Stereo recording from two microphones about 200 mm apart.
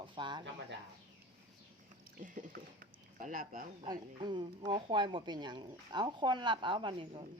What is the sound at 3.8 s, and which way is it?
Speech, 20° right (ahead or behind).